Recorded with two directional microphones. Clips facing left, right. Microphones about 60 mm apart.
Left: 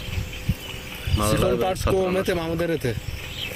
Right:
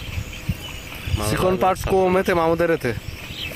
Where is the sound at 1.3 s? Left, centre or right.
Right.